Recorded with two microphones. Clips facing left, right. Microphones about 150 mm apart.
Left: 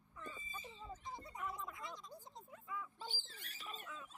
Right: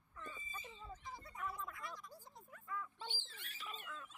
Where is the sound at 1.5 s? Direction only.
20° left (ahead or behind).